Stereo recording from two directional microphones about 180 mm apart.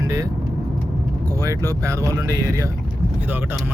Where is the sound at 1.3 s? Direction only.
20° right (ahead or behind).